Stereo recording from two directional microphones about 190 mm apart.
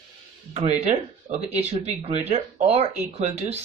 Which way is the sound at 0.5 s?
35° right (ahead or behind).